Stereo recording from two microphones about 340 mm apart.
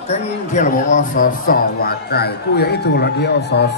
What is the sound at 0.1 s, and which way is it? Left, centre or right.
A man's voice, centre.